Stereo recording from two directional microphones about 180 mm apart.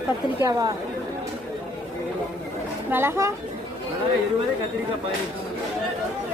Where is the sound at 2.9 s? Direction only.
15° right (ahead or behind).